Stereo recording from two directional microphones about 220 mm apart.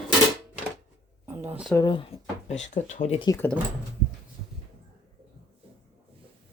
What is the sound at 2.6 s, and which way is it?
Speech, 35° left (ahead or behind).